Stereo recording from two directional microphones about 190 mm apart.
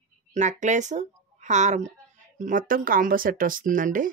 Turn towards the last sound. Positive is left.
turn(degrees=-45)  # may be behind; listen again after turning